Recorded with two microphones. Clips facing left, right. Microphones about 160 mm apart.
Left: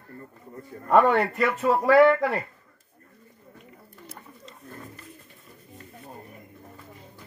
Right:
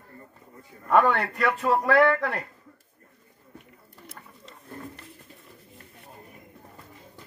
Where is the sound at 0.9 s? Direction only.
Centre (ahead or behind).